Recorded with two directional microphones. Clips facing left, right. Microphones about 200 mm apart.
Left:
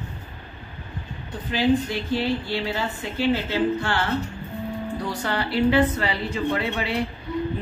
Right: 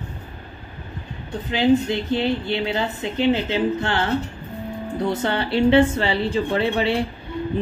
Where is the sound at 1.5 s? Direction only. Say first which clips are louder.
Right 3 dB; 25° right (ahead or behind).